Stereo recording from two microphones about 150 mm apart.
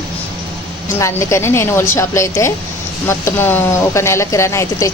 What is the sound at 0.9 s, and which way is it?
Speech, 20° left (ahead or behind).